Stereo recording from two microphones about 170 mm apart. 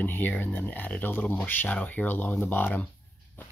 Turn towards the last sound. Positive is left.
turn(degrees=10)  # may be behind; listen again after turning